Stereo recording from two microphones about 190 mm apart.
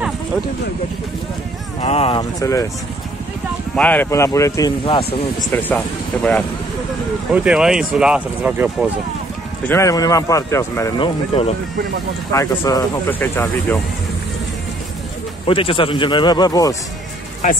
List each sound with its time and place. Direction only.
1.8 s speech: 35° left (ahead or behind)
2.4 s speech: 15° left (ahead or behind)
3.7 s speech: 10° left (ahead or behind)
5.5 s speech: 10° left (ahead or behind)
7.3 s speech: 5° right (ahead or behind)
9.7 s speech: 15° left (ahead or behind)
11.0 s speech: 30° left (ahead or behind)
12.3 s speech: 15° left (ahead or behind)
15.4 s a man's voice: 30° left (ahead or behind)